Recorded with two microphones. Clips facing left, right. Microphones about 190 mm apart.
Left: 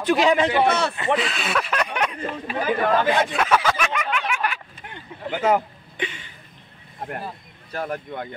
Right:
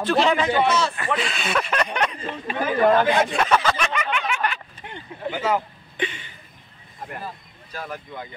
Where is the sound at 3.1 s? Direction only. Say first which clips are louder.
Even; centre (ahead or behind).